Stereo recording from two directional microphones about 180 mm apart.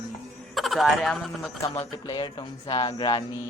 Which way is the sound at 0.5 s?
Centre (ahead or behind).